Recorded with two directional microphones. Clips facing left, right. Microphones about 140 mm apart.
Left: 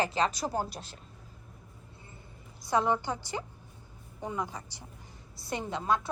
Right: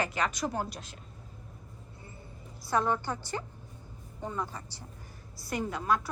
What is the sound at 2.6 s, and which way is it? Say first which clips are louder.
A woman's voice: left 1 dB; 15° left (ahead or behind).